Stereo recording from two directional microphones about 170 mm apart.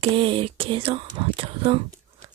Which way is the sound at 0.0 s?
30° right (ahead or behind).